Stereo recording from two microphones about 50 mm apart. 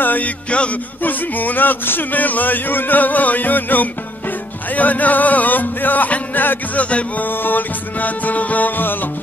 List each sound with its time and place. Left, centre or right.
0.0 s music: left
0.5 s music: left
1.0 s speech: left
6.8 s music: left
7.2 s speech: left